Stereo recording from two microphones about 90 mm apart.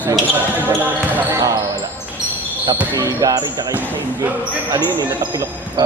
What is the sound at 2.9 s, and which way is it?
Speech, 40° right (ahead or behind).